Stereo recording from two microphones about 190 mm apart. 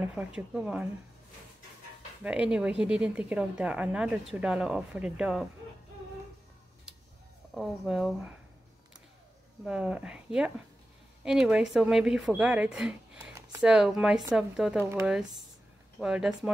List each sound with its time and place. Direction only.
0.0 s speech: 10° right (ahead or behind)
2.2 s a woman's voice: 5° right (ahead or behind)
7.5 s a woman's voice: centre (ahead or behind)
9.7 s a woman's voice: 5° right (ahead or behind)
14.8 s a woman's voice: 15° right (ahead or behind)